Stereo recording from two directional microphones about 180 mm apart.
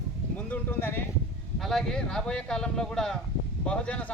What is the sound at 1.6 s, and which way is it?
Speech, centre (ahead or behind).